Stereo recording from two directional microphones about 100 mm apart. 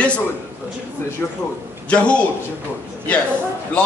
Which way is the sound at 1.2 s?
20° left (ahead or behind).